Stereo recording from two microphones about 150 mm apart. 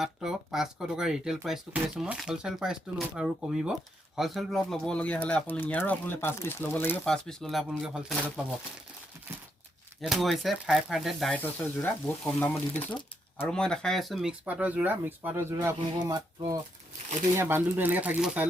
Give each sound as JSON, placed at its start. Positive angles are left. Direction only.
{"t": 0.0, "sound": "speech", "side_deg": -5}
{"t": 10.0, "sound": "speech", "side_deg": 0}
{"t": 11.3, "sound": "speech", "side_deg": 10}